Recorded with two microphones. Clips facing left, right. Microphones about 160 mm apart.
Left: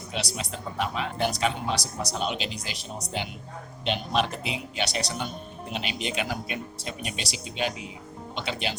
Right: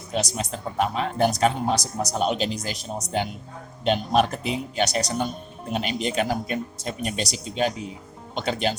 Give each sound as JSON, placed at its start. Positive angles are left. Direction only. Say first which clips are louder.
{"t": 0.1, "sound": "speech", "louder": "right 6 dB", "side_deg": -45}